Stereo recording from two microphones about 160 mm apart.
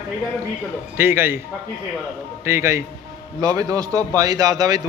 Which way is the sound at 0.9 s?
15° right (ahead or behind).